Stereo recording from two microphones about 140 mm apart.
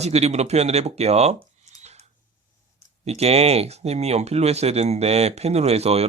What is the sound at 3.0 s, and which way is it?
Speech, 50° right (ahead or behind).